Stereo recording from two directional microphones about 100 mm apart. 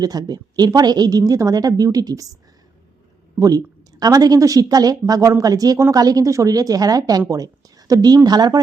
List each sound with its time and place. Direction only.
0.0 s a woman's voice: 40° right (ahead or behind)
3.3 s a woman's voice: 35° right (ahead or behind)